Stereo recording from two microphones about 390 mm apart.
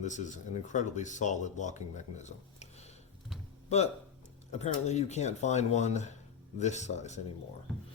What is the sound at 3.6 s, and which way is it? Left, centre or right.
Speech, centre.